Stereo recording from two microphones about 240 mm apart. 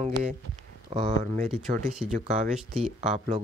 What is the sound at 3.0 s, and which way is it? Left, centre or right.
Speech, right.